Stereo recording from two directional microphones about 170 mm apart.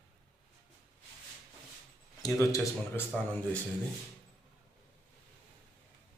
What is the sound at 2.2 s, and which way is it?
Speech, 20° left (ahead or behind).